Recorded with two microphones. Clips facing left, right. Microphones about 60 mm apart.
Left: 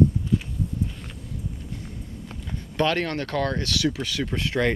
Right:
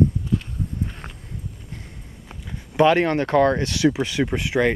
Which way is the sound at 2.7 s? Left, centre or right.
Centre.